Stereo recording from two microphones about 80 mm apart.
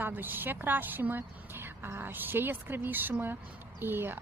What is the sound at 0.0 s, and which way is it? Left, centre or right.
A woman's voice, right.